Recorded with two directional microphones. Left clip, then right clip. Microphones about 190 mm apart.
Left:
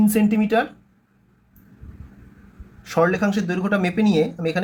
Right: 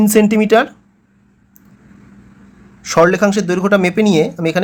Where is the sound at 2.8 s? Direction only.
40° right (ahead or behind).